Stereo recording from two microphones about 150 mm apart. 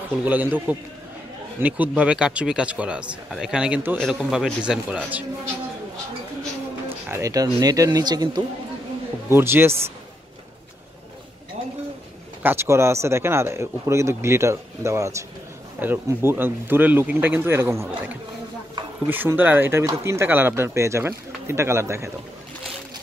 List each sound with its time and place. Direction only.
0.1 s a man's voice: 10° right (ahead or behind)
6.9 s speech: 20° right (ahead or behind)
9.3 s speech: 15° right (ahead or behind)
12.4 s speech: 20° right (ahead or behind)